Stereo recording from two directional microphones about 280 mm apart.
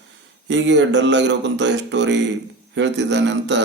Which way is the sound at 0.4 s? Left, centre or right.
Right.